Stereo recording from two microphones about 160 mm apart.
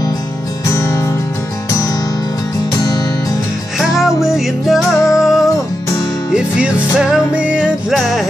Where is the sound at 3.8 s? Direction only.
5° right (ahead or behind).